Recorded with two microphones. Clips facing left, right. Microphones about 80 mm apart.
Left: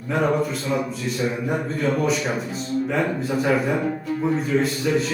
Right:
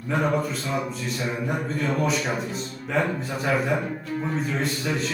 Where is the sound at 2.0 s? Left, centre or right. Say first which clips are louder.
Left 2 dB; centre.